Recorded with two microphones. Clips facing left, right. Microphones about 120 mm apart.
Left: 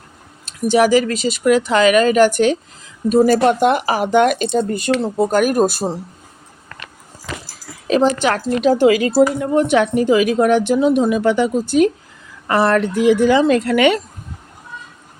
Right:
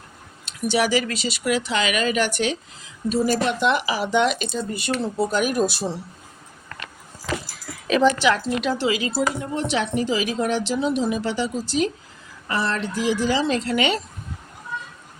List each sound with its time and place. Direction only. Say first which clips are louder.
0.7 s a woman's voice: left 8 dB; 45° left (ahead or behind)
7.9 s a woman's voice: left 3 dB; 40° left (ahead or behind); by 14.0 s 55° left (ahead or behind)